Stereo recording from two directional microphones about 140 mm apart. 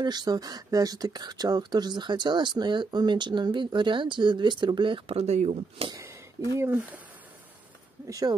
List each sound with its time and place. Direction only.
0.0 s speech: 30° right (ahead or behind); by 5.9 s 55° right (ahead or behind)
6.6 s speech: 15° right (ahead or behind)
8.1 s speech: 25° right (ahead or behind)